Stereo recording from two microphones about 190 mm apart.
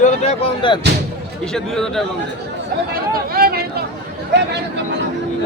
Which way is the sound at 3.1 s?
50° right (ahead or behind).